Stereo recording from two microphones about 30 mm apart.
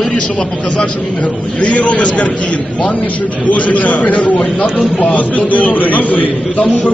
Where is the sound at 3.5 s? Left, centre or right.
Left.